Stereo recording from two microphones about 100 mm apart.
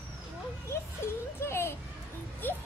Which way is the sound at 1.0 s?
25° left (ahead or behind).